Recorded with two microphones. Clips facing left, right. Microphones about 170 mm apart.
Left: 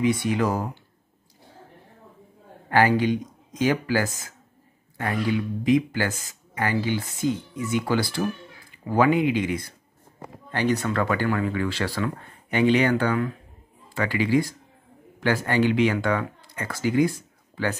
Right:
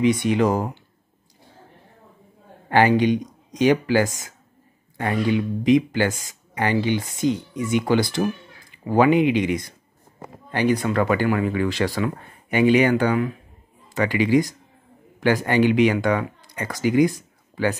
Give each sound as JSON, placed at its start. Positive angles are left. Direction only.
{"t": 0.0, "sound": "speech", "side_deg": -20}
{"t": 2.7, "sound": "speech", "side_deg": -20}